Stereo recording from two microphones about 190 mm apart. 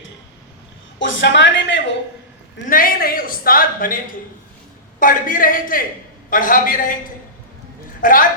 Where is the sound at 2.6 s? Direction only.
45° left (ahead or behind).